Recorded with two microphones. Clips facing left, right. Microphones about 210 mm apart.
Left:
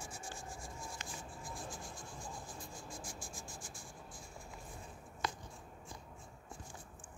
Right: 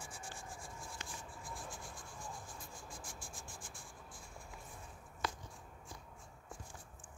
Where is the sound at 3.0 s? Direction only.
55° right (ahead or behind).